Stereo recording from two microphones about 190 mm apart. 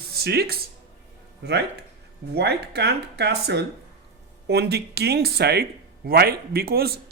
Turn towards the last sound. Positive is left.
turn(degrees=-55)  # may be behind; listen again after turning